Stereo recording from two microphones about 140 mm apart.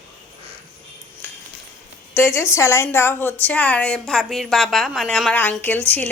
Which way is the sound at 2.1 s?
20° left (ahead or behind).